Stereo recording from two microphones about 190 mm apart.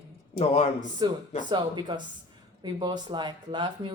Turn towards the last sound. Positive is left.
turn(degrees=-25)  # may be behind; listen again after turning